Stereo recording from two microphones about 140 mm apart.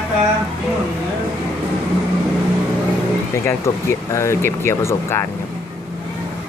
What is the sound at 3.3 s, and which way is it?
Speech, 20° left (ahead or behind).